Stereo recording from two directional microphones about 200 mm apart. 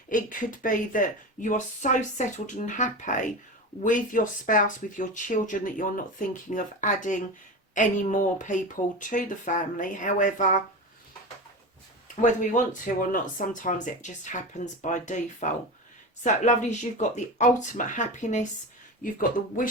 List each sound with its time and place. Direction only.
0.1 s speech: 40° left (ahead or behind)
12.0 s speech: 40° left (ahead or behind)